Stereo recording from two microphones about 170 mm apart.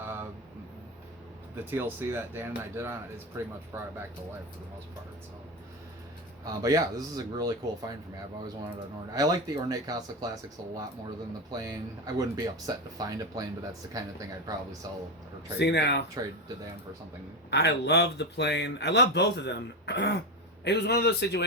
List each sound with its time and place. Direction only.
0.0 s vehicle: 15° right (ahead or behind)
1.5 s speech: 15° right (ahead or behind)
6.4 s speech: 20° right (ahead or behind)
11.5 s speech: 20° right (ahead or behind)
15.5 s speech: 80° left
17.5 s speech: 80° left
20.7 s a man's voice: 80° left